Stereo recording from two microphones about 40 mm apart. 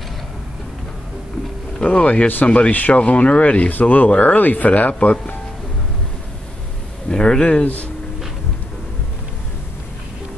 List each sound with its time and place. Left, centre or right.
1.9 s speech: left
3.8 s speech: left
7.1 s speech: centre